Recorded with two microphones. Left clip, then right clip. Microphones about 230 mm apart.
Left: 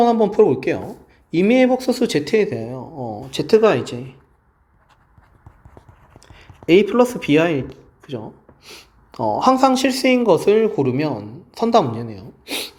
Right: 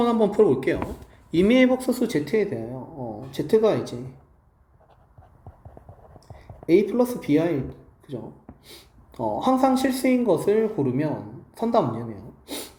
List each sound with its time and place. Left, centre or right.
0.0 s speech: centre
6.9 s speech: left
8.6 s a sound: centre
9.4 s speech: left